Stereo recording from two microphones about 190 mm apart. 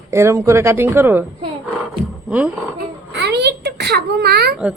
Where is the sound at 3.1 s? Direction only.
65° right (ahead or behind).